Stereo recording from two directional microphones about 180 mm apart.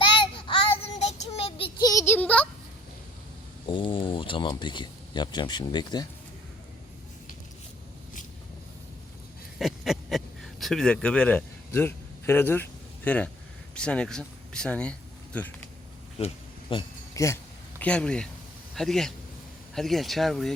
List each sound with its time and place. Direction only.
0.0 s child singing: 30° left (ahead or behind)
1.9 s a sound: 15° left (ahead or behind)
3.7 s speech: 25° left (ahead or behind)
9.6 s a sound: centre (ahead or behind)
13.1 s speech: 10° left (ahead or behind)
16.1 s bee: 30° left (ahead or behind)
17.2 s speech: 20° left (ahead or behind)
17.7 s speech: 5° left (ahead or behind)